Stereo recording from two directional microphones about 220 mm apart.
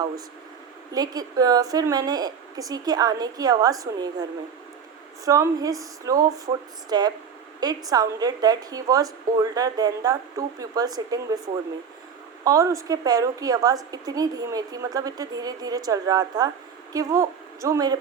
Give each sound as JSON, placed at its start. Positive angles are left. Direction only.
{"t": 0.9, "sound": "a woman's voice", "side_deg": -15}
{"t": 12.5, "sound": "a woman's voice", "side_deg": -15}